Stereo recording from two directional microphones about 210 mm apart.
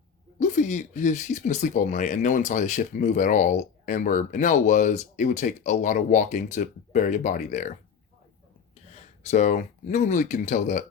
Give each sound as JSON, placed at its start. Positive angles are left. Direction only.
{"t": 0.3, "sound": "speech", "side_deg": 35}
{"t": 8.9, "sound": "speech", "side_deg": 30}